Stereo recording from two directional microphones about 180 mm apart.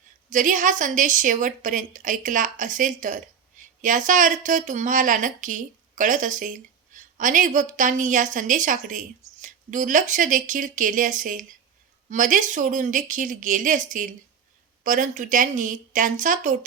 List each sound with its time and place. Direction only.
0.3 s a woman's voice: 45° right (ahead or behind)